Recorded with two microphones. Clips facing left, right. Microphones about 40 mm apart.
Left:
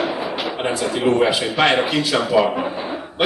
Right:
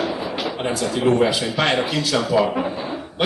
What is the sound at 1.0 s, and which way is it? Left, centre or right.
Speech, centre.